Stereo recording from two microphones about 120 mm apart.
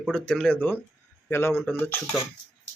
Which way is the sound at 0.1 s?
10° left (ahead or behind).